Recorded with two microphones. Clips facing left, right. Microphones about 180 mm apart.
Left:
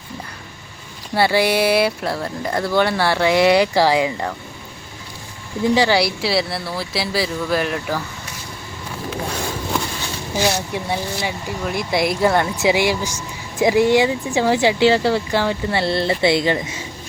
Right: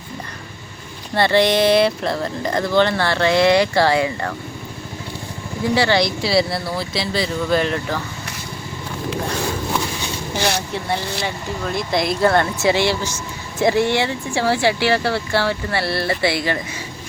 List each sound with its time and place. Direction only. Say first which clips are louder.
1.1 s speech: right 1 dB; 10° left (ahead or behind)
5.7 s speech: even; 15° left (ahead or behind)
10.4 s speech: left 2 dB; 10° left (ahead or behind)